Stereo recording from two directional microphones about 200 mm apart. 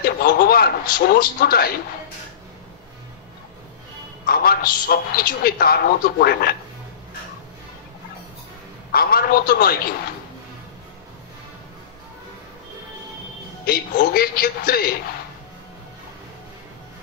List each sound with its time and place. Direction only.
0.0 s a sound: 45° left (ahead or behind)
4.3 s a man's voice: 50° left (ahead or behind)
8.9 s a man's voice: 50° left (ahead or behind)
13.7 s a man's voice: 50° left (ahead or behind)